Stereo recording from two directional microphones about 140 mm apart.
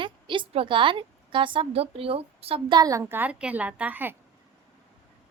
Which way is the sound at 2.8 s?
25° right (ahead or behind).